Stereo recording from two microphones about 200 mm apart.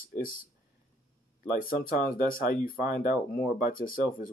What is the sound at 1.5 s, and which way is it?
Speech, 45° left (ahead or behind).